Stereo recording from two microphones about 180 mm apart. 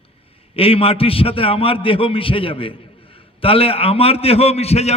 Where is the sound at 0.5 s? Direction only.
30° left (ahead or behind).